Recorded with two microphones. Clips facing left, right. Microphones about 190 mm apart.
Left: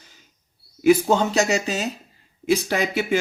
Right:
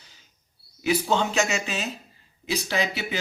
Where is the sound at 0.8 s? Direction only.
45° left (ahead or behind).